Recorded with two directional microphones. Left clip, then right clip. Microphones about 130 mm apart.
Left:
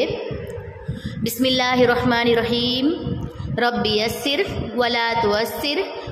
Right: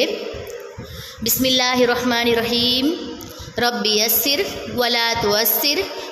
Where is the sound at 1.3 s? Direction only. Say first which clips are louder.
Right 2 dB; 5° left (ahead or behind).